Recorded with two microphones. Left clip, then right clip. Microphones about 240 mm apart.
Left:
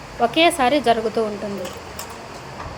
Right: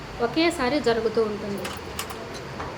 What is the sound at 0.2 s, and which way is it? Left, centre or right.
A woman's voice, centre.